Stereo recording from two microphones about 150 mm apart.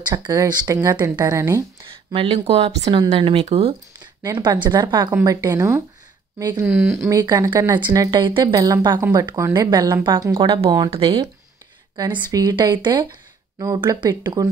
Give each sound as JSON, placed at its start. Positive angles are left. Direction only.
{"t": 0.0, "sound": "a woman's voice", "side_deg": -25}
{"t": 1.9, "sound": "speech", "side_deg": -35}
{"t": 4.2, "sound": "a woman's voice", "side_deg": -25}